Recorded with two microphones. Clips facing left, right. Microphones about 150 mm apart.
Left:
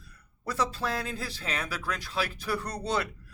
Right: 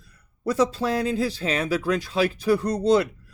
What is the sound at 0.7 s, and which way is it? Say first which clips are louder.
Speech: right 9 dB; 25° right (ahead or behind).